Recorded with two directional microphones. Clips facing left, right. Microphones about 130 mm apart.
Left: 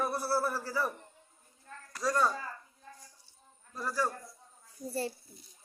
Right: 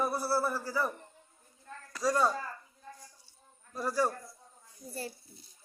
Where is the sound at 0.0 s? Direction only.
Centre (ahead or behind).